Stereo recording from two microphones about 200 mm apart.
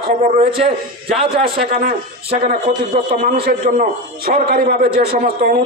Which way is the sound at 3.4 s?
45° right (ahead or behind).